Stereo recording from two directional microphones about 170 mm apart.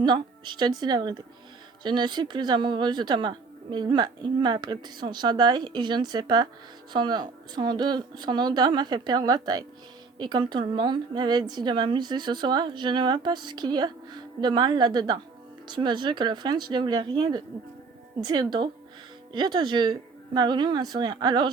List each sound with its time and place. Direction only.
0.0 s a woman's voice: 25° right (ahead or behind)